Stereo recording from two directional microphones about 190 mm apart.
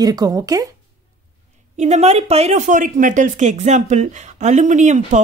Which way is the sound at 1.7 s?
35° right (ahead or behind).